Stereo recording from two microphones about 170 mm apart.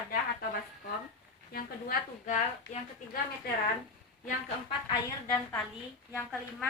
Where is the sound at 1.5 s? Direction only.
60° left (ahead or behind).